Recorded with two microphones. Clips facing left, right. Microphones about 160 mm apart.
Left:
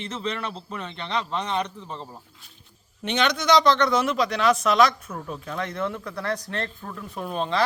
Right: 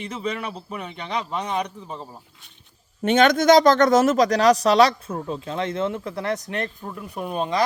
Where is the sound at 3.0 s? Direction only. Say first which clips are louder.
Right 8 dB; 50° right (ahead or behind); by 7.6 s 10° right (ahead or behind).